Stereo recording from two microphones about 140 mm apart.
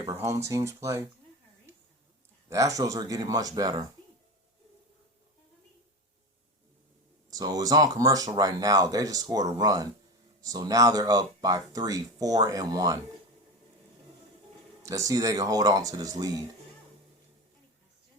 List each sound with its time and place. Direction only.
0.0 s speech: 20° right (ahead or behind)
2.5 s speech: 25° right (ahead or behind)
7.3 s speech: 25° right (ahead or behind)
14.8 s speech: 20° right (ahead or behind)